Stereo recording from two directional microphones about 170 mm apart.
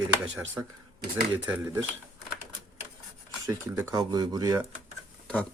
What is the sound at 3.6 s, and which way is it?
Speech, 15° right (ahead or behind).